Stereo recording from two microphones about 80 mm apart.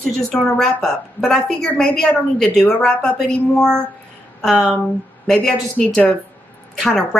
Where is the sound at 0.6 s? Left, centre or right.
Centre.